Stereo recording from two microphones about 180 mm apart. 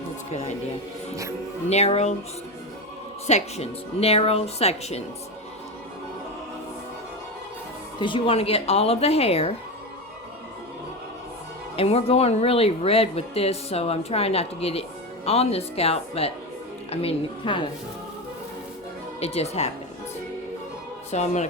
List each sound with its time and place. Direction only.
1.7 s speech: 35° left (ahead or behind)
3.2 s speech: 35° left (ahead or behind)
7.9 s speech: 25° left (ahead or behind)
11.8 s speech: 35° left (ahead or behind)
19.2 s speech: 35° left (ahead or behind)
21.1 s speech: 40° left (ahead or behind)